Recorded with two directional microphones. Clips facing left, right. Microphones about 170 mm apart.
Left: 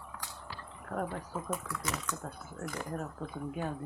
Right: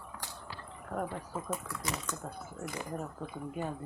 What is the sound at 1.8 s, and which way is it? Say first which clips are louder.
Speech: even; 35° right (ahead or behind).